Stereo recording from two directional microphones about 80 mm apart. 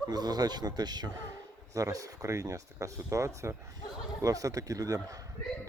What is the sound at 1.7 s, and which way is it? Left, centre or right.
Speech, right.